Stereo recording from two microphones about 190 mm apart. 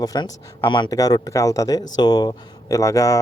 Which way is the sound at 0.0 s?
20° left (ahead or behind).